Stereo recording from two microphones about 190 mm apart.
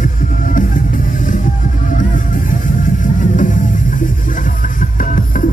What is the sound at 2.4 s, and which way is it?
Music, 45° left (ahead or behind).